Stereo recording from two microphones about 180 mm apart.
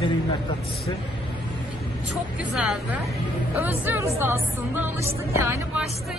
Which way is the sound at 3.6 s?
10° right (ahead or behind).